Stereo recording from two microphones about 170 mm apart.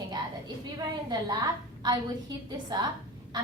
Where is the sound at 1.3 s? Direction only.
20° right (ahead or behind).